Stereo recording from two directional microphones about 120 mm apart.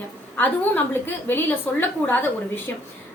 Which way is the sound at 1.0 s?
15° left (ahead or behind).